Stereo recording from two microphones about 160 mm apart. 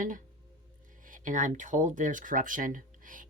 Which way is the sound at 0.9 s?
55° right (ahead or behind).